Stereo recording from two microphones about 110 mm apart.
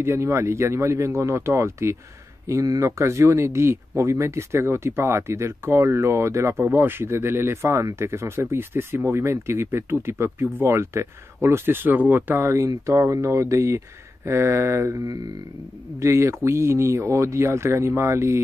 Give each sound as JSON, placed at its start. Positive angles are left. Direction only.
{"t": 0.0, "sound": "speech", "side_deg": -25}